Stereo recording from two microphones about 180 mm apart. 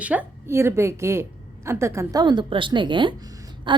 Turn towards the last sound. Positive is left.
turn(degrees=-20)  # may be behind; listen again after turning